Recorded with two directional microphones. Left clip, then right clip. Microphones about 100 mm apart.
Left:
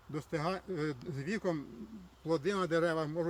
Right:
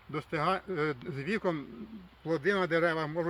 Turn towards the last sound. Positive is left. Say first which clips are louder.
# right 3 dB
turn(degrees=5)  # may be behind; listen again after turning